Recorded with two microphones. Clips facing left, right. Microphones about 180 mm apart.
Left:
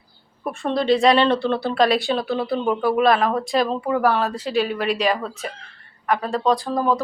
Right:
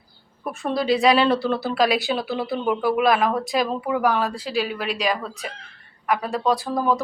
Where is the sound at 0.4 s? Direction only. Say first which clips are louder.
Left 2 dB; centre (ahead or behind).